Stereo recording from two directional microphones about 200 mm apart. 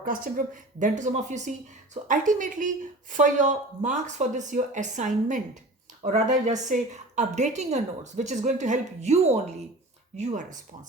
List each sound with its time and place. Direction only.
0.0 s speech: 45° right (ahead or behind)